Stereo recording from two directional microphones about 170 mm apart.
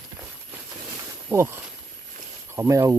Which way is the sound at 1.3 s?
10° right (ahead or behind).